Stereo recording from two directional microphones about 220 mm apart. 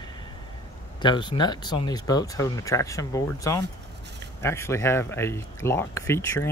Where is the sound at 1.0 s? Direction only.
20° left (ahead or behind).